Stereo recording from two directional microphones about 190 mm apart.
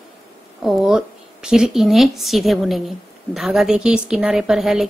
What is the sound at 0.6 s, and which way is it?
A woman's voice, centre (ahead or behind).